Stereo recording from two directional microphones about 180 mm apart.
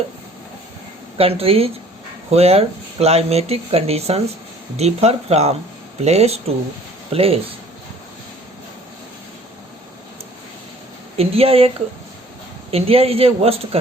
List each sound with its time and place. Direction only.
1.2 s speech: 35° right (ahead or behind)
11.2 s speech: 35° right (ahead or behind)
12.7 s speech: 35° right (ahead or behind)